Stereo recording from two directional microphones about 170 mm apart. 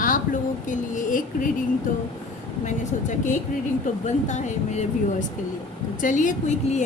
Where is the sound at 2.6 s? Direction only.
45° left (ahead or behind).